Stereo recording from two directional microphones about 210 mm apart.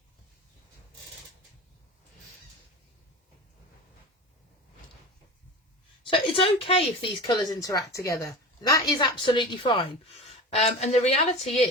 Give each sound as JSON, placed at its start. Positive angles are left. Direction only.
{"t": 6.0, "sound": "a woman's voice", "side_deg": 25}